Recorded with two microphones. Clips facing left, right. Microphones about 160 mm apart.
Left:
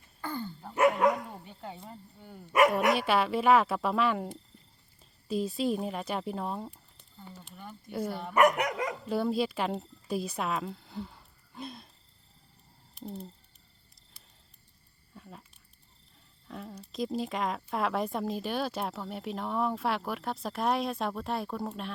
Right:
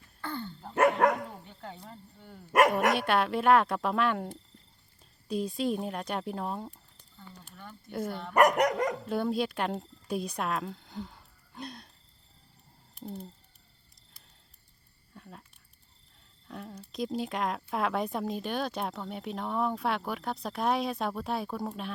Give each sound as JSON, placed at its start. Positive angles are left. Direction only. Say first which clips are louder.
{"t": 0.2, "sound": "a sound", "louder": "left 1 dB", "side_deg": 10}
{"t": 0.8, "sound": "dog", "louder": "even", "side_deg": -60}
{"t": 1.5, "sound": "speech", "louder": "left 1 dB", "side_deg": 10}
{"t": 2.9, "sound": "speech", "louder": "even", "side_deg": 0}
{"t": 8.4, "sound": "dog", "louder": "right 2 dB", "side_deg": -40}
{"t": 9.0, "sound": "speech", "louder": "left 1 dB", "side_deg": 0}
{"t": 12.9, "sound": "a sound", "louder": "even", "side_deg": 0}
{"t": 15.1, "sound": "a sound", "louder": "even", "side_deg": 0}
{"t": 16.5, "sound": "speech", "louder": "even", "side_deg": 0}